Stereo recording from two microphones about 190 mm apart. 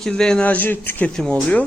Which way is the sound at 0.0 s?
5° left (ahead or behind).